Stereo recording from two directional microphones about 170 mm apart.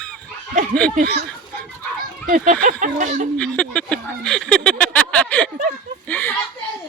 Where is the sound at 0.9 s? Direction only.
65° right (ahead or behind).